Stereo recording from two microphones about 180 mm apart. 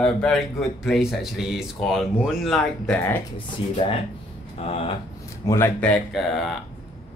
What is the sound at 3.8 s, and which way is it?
Speech, 35° left (ahead or behind).